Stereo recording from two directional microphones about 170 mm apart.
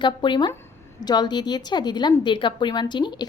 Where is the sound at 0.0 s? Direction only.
25° left (ahead or behind).